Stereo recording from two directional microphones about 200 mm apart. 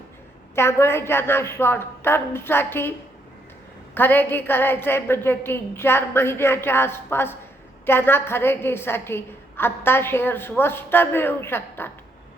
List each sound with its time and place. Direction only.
0.5 s a woman's voice: 10° left (ahead or behind)
3.9 s a woman's voice: 10° left (ahead or behind)